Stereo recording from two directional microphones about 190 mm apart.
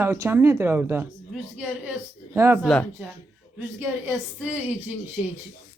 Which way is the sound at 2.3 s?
15° right (ahead or behind).